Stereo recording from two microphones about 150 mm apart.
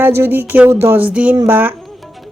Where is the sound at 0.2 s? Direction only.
15° right (ahead or behind).